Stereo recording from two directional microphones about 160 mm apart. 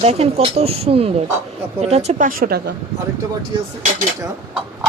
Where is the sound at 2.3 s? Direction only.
60° right (ahead or behind).